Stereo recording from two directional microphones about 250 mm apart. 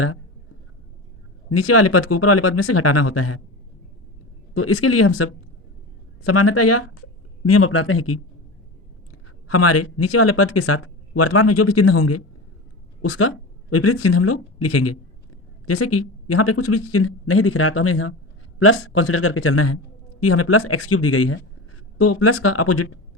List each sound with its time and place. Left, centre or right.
1.5 s a man's voice: left
4.5 s a man's voice: left
9.5 s a woman's voice: left